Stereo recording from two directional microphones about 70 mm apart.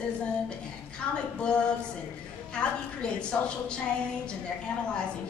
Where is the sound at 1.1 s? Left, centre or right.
Centre.